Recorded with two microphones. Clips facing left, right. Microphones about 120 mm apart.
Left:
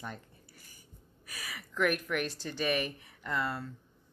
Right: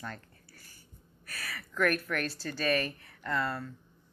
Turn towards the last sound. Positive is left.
turn(degrees=20)  # may be behind; listen again after turning